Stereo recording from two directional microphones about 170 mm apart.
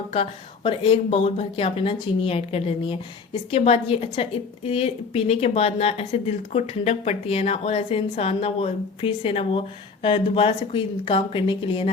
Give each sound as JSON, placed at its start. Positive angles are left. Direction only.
{"t": 0.1, "sound": "a woman's voice", "side_deg": 35}